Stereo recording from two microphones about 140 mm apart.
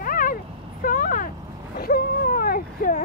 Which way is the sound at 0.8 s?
75° left (ahead or behind).